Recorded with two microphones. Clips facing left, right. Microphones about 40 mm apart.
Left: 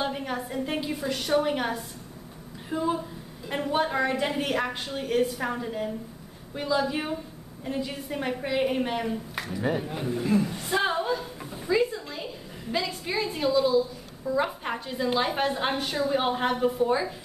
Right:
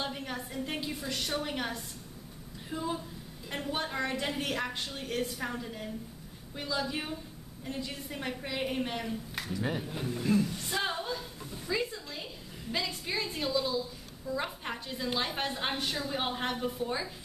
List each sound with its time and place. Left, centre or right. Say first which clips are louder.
0.0 s a woman's voice: left 7 dB; centre
11.7 s a woman's voice: left 9 dB; centre